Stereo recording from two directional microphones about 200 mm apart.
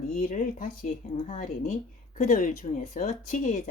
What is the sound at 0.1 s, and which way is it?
Speech, 40° left (ahead or behind).